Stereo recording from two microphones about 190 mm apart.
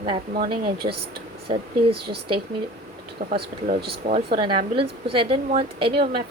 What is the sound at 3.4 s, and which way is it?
Speech, 55° right (ahead or behind).